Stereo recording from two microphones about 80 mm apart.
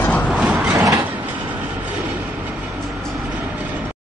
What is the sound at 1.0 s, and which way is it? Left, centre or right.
Train, right.